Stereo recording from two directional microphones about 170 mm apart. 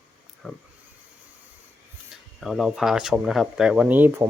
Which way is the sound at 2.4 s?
Centre (ahead or behind).